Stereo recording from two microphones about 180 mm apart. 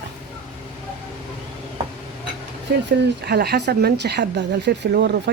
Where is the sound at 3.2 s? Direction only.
60° right (ahead or behind).